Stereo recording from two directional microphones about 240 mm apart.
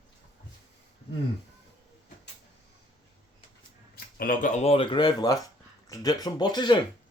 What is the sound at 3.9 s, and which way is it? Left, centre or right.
Speech, left.